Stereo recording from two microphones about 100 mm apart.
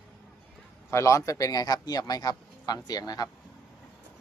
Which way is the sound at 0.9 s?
30° left (ahead or behind).